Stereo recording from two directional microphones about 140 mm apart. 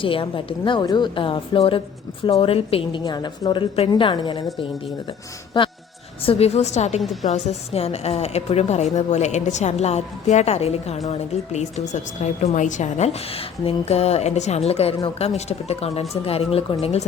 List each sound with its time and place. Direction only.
0.0 s a woman's voice: 40° left (ahead or behind)
3.0 s a woman's voice: 30° left (ahead or behind)
5.5 s speech: 35° left (ahead or behind)
6.2 s a woman's voice: 45° left (ahead or behind)
7.0 s a woman's voice: centre (ahead or behind)
7.3 s a woman's voice: 50° left (ahead or behind)